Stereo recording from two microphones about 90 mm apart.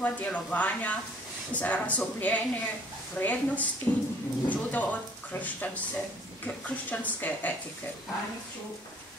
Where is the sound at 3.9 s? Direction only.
50° left (ahead or behind).